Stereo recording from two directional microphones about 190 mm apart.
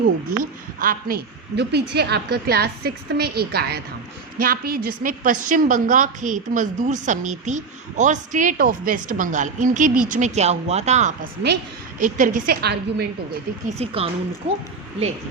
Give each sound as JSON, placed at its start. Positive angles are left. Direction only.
{"t": 0.3, "sound": "a woman's voice", "side_deg": -50}
{"t": 13.7, "sound": "speech", "side_deg": -35}